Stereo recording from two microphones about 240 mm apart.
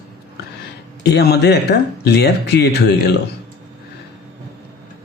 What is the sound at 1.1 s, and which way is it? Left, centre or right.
Speech, left.